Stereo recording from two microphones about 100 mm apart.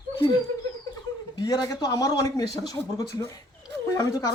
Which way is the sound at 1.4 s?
35° left (ahead or behind).